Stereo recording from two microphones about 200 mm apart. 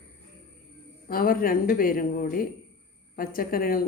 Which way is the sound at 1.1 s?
45° left (ahead or behind).